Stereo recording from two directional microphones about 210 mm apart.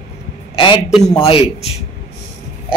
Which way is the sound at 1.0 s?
20° left (ahead or behind).